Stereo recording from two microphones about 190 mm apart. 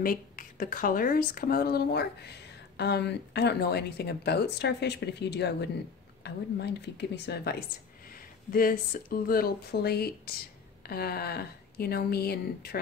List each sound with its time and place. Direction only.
0.0 s speech: 45° left (ahead or behind)